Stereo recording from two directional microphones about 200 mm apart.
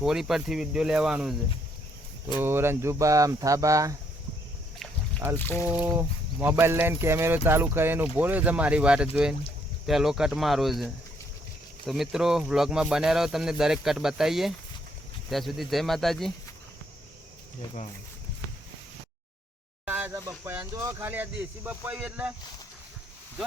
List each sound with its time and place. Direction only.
0.0 s speech: centre (ahead or behind)
2.4 s speech: 10° right (ahead or behind)
5.4 s speech: 10° left (ahead or behind)
5.6 s speech: 10° right (ahead or behind)
19.8 s speech: 10° right (ahead or behind)